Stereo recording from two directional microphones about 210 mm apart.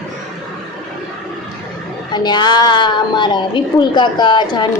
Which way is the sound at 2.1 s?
20° left (ahead or behind).